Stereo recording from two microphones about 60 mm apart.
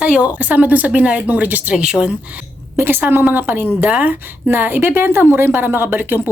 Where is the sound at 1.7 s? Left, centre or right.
Centre.